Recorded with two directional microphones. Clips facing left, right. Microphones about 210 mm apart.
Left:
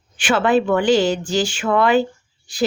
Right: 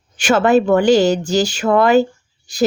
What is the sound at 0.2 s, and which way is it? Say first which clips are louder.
A woman's voice: right 4 dB; 45° right (ahead or behind).